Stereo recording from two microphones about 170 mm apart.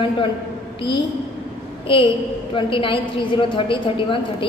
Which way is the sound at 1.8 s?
30° left (ahead or behind).